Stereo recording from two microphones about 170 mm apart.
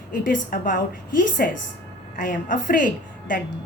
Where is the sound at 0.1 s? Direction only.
50° left (ahead or behind).